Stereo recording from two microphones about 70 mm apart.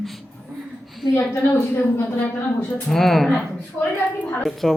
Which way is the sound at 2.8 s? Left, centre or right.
Centre.